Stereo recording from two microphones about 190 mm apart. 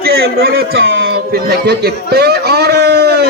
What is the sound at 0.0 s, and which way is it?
Speech, 55° right (ahead or behind).